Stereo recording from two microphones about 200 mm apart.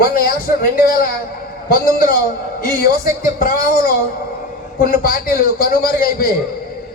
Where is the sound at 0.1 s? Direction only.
45° left (ahead or behind).